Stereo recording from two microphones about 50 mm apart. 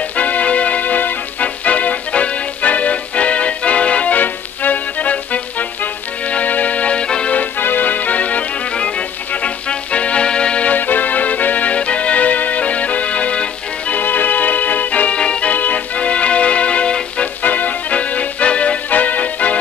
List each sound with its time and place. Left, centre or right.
0.1 s music: left
7.3 s music: left
10.7 s music: left
14.0 s music: left
15.5 s music: left
17.4 s music: left